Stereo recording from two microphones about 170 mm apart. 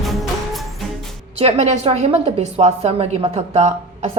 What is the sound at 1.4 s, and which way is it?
A woman's voice, 40° right (ahead or behind).